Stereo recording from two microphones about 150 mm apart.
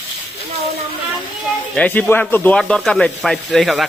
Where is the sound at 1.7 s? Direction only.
10° left (ahead or behind).